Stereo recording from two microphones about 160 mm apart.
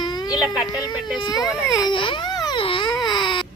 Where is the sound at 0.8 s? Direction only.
25° left (ahead or behind).